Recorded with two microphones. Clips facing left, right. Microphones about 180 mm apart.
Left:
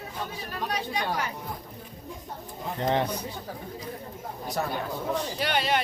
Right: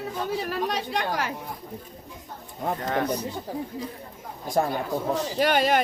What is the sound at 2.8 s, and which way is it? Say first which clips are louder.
Speech: left 4 dB; 25° left (ahead or behind).